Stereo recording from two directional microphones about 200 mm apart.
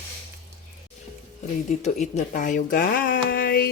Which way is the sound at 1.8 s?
35° left (ahead or behind).